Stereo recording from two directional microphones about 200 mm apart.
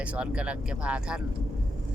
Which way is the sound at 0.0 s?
5° right (ahead or behind).